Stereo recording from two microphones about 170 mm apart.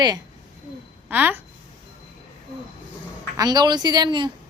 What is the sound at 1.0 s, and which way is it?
Speech, 10° right (ahead or behind).